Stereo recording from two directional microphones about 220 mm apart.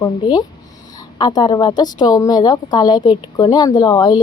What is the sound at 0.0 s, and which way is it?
A woman's voice, 20° left (ahead or behind).